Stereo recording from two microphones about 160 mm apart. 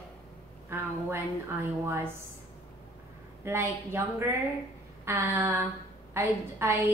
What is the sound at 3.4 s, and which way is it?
A woman's voice, 15° right (ahead or behind).